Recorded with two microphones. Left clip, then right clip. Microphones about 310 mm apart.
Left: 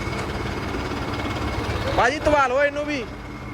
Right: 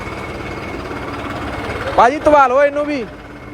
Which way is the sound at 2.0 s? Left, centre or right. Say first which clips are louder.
Right 9 dB; centre.